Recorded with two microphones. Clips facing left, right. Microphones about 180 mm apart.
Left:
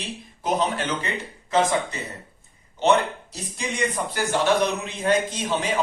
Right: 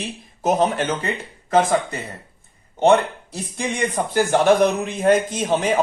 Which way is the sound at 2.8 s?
55° right (ahead or behind).